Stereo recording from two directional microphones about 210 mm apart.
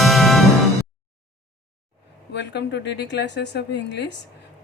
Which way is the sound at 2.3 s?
55° left (ahead or behind).